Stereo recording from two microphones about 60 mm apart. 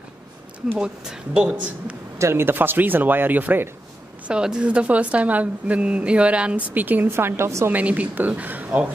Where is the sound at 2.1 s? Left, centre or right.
Right.